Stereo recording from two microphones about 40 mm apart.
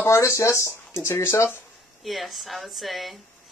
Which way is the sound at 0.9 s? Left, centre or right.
Left.